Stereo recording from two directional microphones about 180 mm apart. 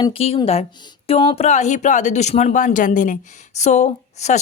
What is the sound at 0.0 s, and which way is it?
Speech, 30° left (ahead or behind).